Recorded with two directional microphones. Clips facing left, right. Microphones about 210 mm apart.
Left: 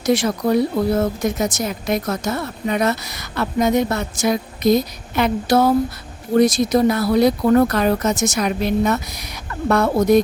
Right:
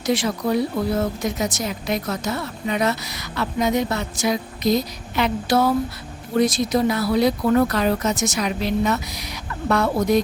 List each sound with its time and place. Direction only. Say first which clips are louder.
0.0 s speech: left 4 dB; 45° left (ahead or behind)